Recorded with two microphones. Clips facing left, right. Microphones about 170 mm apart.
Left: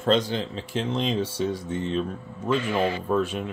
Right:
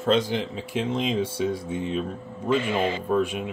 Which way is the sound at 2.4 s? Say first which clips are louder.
Even; 20° right (ahead or behind).